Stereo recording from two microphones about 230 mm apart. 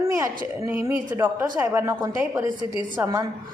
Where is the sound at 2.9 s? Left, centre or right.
Centre.